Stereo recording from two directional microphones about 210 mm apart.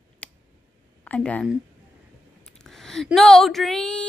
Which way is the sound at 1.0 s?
5° left (ahead or behind).